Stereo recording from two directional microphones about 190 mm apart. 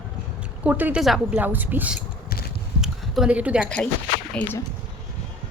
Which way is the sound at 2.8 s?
5° right (ahead or behind).